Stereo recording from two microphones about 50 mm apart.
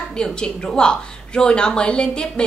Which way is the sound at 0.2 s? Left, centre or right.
Centre.